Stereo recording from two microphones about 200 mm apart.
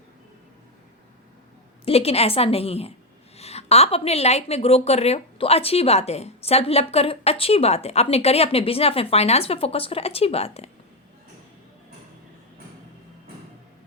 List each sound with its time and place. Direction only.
1.8 s a woman's voice: 30° left (ahead or behind)